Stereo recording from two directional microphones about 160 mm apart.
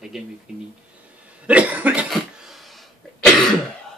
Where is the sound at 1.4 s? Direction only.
10° right (ahead or behind).